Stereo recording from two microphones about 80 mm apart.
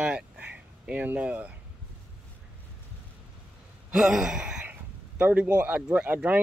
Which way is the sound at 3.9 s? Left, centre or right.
Centre.